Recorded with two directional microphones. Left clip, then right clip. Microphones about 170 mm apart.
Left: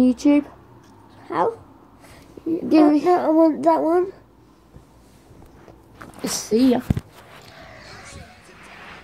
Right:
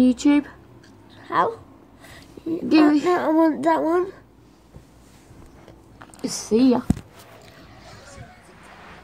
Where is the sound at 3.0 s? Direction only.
20° right (ahead or behind).